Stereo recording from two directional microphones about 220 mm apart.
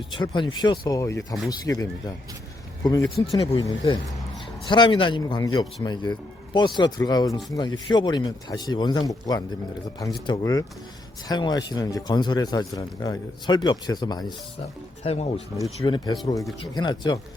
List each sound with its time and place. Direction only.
0.1 s speech: 20° left (ahead or behind)